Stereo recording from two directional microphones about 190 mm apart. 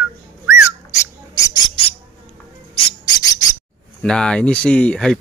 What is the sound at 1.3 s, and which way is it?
Bird, 20° left (ahead or behind).